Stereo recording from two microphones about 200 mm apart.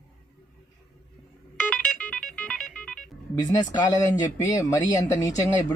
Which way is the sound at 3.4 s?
20° left (ahead or behind).